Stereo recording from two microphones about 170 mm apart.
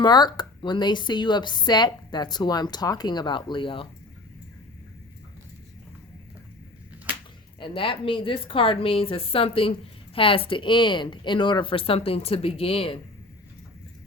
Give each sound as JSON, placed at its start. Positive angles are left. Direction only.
{"t": 0.0, "sound": "a woman's voice", "side_deg": 25}
{"t": 7.6, "sound": "speech", "side_deg": 30}